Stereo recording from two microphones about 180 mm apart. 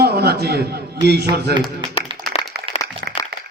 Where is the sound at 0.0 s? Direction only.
65° right (ahead or behind).